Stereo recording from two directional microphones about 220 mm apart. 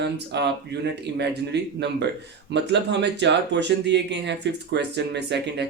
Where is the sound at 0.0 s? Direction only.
50° right (ahead or behind).